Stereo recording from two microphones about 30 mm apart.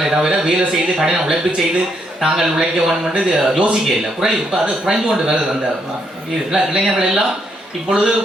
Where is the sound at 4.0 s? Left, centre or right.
Centre.